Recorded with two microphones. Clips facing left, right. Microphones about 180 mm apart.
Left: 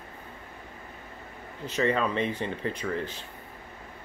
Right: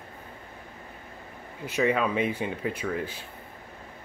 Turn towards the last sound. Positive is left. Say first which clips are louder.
# right 1 dB
turn(degrees=-10)  # may be behind; listen again after turning